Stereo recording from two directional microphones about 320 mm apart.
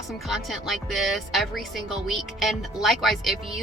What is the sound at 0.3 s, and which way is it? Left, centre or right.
Speech, centre.